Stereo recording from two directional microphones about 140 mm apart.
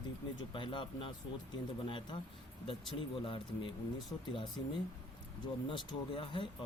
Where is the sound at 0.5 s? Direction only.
35° left (ahead or behind).